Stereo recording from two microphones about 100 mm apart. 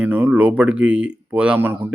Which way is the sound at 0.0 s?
15° right (ahead or behind).